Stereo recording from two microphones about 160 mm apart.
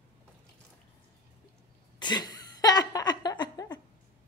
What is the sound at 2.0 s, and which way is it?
Laughter, 25° left (ahead or behind).